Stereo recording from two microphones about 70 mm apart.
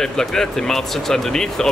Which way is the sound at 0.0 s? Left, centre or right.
Centre.